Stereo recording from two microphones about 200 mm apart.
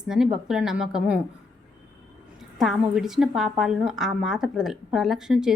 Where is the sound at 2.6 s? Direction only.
Centre (ahead or behind).